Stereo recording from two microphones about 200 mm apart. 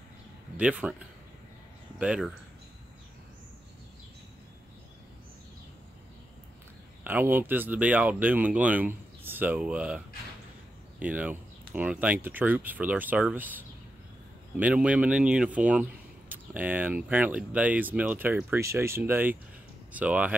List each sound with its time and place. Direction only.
0.6 s speech: 5° right (ahead or behind)
7.1 s speech: 10° right (ahead or behind)